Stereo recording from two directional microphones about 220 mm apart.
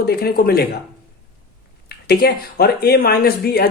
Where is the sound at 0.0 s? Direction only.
45° left (ahead or behind).